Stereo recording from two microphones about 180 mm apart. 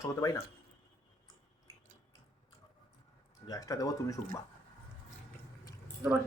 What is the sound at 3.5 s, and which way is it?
Speech, 20° left (ahead or behind).